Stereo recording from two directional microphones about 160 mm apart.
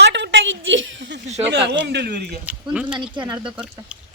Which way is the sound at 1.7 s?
90° right.